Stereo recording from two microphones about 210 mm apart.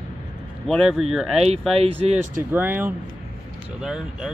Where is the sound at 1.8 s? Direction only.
30° right (ahead or behind).